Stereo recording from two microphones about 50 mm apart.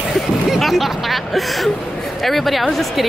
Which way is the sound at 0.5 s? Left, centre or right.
Centre.